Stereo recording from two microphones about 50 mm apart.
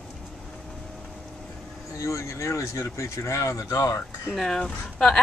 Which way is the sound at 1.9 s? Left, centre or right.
Left.